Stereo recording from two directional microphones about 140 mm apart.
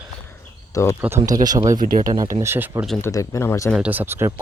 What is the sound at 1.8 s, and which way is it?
Speech, 75° right (ahead or behind).